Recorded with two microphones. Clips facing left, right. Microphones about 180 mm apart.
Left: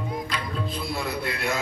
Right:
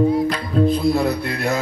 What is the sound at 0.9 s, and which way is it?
Speech, 40° right (ahead or behind).